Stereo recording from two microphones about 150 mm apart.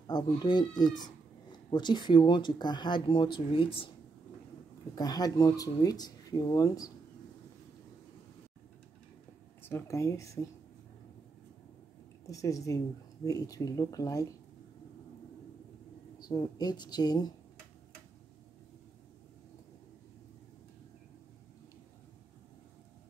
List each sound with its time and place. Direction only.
0.0 s speech: 30° left (ahead or behind)
4.9 s speech: 25° left (ahead or behind)
9.6 s speech: 15° left (ahead or behind)
12.3 s speech: 20° left (ahead or behind)
16.2 s speech: 25° left (ahead or behind)